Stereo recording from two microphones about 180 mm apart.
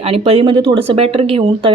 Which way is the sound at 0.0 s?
35° right (ahead or behind).